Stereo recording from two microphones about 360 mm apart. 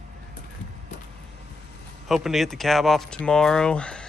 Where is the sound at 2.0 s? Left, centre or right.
Centre.